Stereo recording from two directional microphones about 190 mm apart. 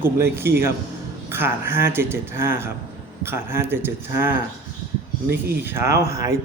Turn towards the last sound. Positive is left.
turn(degrees=-15)  # may be behind; listen again after turning